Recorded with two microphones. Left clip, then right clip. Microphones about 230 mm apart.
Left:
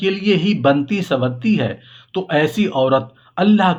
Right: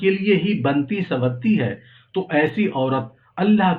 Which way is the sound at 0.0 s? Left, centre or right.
Left.